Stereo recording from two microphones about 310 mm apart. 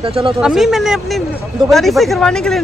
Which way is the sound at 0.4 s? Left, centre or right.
Centre.